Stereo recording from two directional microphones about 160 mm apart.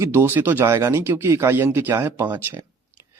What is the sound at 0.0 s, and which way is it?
Speech, 15° right (ahead or behind).